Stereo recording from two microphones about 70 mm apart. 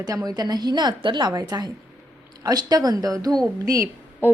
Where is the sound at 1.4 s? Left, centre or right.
Right.